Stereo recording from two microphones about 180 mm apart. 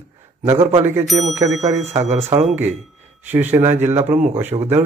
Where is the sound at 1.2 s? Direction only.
40° right (ahead or behind).